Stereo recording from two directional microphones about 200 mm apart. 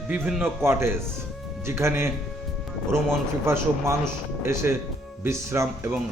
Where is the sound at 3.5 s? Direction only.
15° right (ahead or behind).